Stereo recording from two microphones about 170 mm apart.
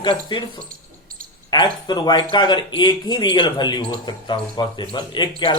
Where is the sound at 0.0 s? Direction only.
25° left (ahead or behind).